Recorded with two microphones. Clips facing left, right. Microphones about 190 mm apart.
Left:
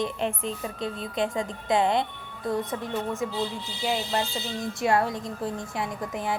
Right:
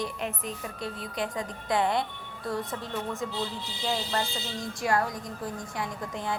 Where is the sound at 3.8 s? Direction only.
15° left (ahead or behind).